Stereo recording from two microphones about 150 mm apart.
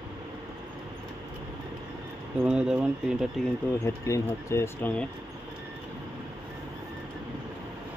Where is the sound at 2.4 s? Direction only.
5° right (ahead or behind).